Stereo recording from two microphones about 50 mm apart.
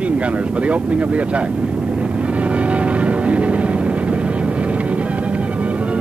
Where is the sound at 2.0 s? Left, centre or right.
Right.